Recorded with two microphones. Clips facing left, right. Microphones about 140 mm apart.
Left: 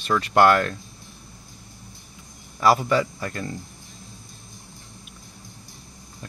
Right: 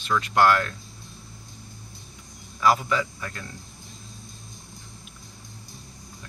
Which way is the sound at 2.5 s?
40° left (ahead or behind).